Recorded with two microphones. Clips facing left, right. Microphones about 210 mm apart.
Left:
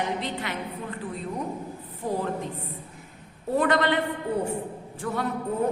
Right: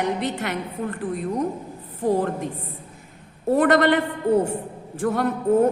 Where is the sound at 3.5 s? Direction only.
50° right (ahead or behind).